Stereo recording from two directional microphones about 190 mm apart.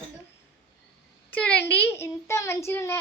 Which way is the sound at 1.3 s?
5° left (ahead or behind).